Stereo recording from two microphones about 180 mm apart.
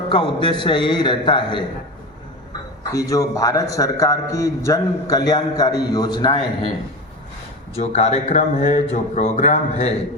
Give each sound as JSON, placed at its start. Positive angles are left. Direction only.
{"t": 0.1, "sound": "a man's voice", "side_deg": 30}
{"t": 2.9, "sound": "a man's voice", "side_deg": 20}
{"t": 7.8, "sound": "speech", "side_deg": 35}